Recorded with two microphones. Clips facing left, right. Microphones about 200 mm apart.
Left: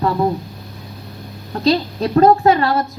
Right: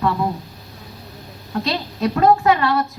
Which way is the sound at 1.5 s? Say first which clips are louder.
Left 7 dB; 35° left (ahead or behind).